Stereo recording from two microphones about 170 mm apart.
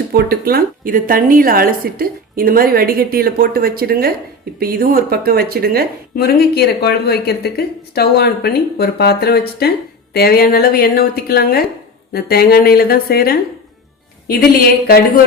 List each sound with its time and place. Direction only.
0.1 s a woman's voice: 65° right (ahead or behind)
6.1 s a woman's voice: 65° left (ahead or behind)